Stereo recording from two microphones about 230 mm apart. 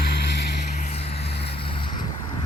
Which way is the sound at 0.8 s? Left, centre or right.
Left.